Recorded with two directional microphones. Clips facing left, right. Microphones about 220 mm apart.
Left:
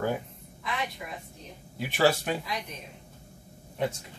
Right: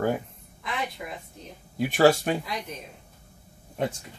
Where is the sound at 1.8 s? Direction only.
45° right (ahead or behind).